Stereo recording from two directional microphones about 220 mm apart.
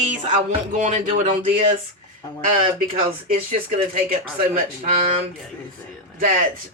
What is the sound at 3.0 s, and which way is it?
Speech, 30° right (ahead or behind).